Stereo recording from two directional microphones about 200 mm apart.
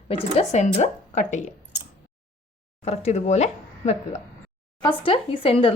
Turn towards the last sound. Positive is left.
turn(degrees=25)  # may be behind; listen again after turning